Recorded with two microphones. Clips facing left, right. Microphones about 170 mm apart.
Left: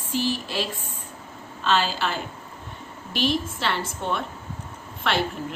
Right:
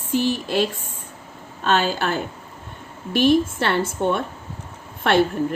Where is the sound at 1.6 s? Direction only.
50° right (ahead or behind).